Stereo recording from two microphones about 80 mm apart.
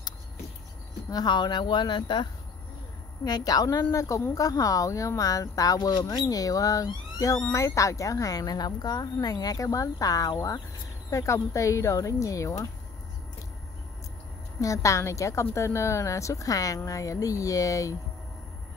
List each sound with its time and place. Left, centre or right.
1.1 s speech: left
3.3 s speech: left
6.0 s a woman's voice: left
14.6 s a woman's voice: left